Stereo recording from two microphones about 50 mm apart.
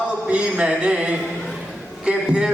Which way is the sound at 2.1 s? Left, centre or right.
Centre.